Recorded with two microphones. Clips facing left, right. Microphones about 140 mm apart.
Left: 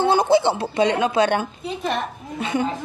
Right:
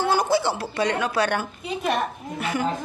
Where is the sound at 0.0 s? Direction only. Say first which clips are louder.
Left 5 dB; 25° left (ahead or behind).